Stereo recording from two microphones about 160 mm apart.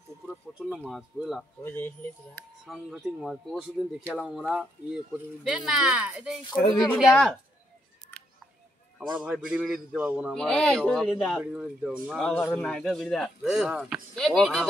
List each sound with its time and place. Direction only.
0.3 s speech: 5° right (ahead or behind)
1.6 s speech: 10° left (ahead or behind)
2.6 s a man's voice: 5° right (ahead or behind)
6.6 s speech: 65° left (ahead or behind)
7.0 s a man's voice: centre (ahead or behind)
8.1 s scissors: 5° left (ahead or behind)
9.0 s a man's voice: 5° right (ahead or behind)
10.3 s a man's voice: 5° left (ahead or behind)